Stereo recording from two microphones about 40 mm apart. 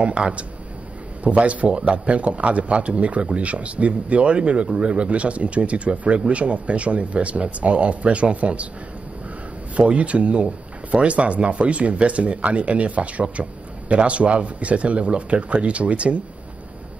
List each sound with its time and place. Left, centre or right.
0.0 s speech: right
9.8 s speech: right